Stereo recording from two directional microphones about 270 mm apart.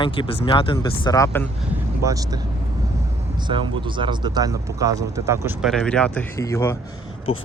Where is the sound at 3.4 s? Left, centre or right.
Centre.